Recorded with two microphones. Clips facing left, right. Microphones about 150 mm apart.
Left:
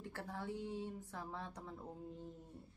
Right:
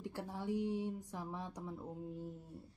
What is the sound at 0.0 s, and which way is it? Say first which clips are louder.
Speech: right 3 dB; 15° right (ahead or behind).